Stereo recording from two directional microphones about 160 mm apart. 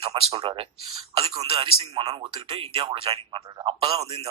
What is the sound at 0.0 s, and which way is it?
A man's voice, 35° right (ahead or behind).